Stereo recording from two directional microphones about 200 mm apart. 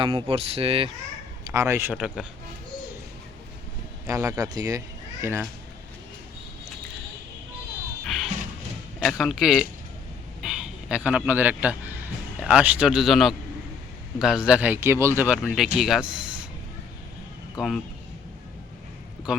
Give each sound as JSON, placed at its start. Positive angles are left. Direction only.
{"t": 0.0, "sound": "speech", "side_deg": -25}
{"t": 1.5, "sound": "speech", "side_deg": -15}
{"t": 4.0, "sound": "speech", "side_deg": -15}
{"t": 9.0, "sound": "a man's voice", "side_deg": 0}
{"t": 15.4, "sound": "speech", "side_deg": 0}
{"t": 17.6, "sound": "speech", "side_deg": 0}
{"t": 19.3, "sound": "speech", "side_deg": -5}